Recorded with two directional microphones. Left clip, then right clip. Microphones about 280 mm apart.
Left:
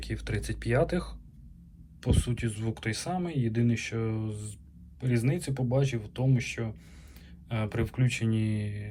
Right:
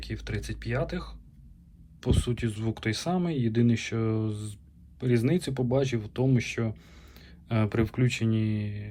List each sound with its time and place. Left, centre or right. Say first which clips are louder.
0.0 s speech: left 1 dB; centre